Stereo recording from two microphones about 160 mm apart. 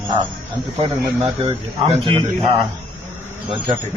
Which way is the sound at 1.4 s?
35° right (ahead or behind).